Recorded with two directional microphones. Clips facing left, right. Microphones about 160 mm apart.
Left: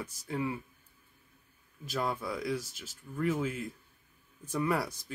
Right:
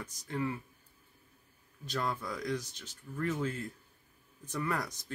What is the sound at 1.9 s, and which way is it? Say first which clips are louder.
Speech: left 2 dB; 10° left (ahead or behind).